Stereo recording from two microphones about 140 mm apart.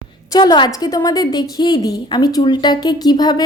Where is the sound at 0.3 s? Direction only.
30° left (ahead or behind).